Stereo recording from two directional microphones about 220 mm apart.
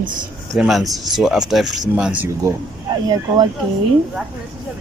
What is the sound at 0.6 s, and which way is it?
Speech, centre (ahead or behind).